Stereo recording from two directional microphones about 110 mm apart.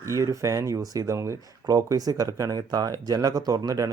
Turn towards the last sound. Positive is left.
turn(degrees=-35)  # may be behind; listen again after turning